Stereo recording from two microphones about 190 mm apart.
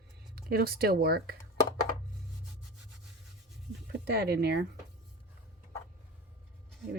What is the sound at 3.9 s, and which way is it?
Speech, 55° right (ahead or behind).